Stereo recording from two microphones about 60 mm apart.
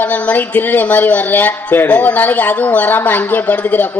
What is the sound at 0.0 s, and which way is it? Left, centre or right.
A woman's voice, left.